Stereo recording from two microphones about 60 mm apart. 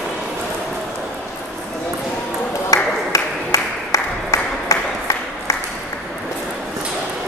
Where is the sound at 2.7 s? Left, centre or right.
Left.